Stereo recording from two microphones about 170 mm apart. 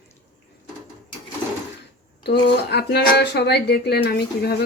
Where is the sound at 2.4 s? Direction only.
75° left (ahead or behind).